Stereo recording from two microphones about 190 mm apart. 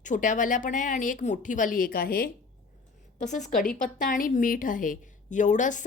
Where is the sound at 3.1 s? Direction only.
40° left (ahead or behind).